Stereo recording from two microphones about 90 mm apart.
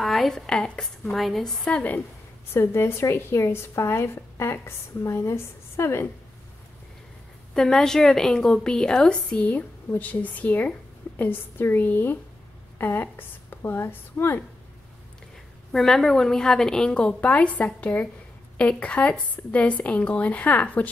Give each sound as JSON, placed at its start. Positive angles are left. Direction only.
{"t": 0.0, "sound": "a woman's voice", "side_deg": 0}
{"t": 2.5, "sound": "speech", "side_deg": 30}
{"t": 7.5, "sound": "speech", "side_deg": 5}
{"t": 15.7, "sound": "speech", "side_deg": 5}